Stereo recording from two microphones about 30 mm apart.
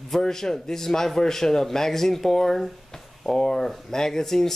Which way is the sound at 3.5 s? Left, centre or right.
Centre.